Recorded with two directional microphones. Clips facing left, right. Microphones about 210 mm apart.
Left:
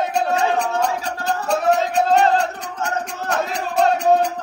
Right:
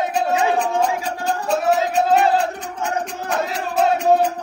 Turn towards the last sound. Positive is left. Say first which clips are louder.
# even
turn(degrees=0)  # may be behind; listen again after turning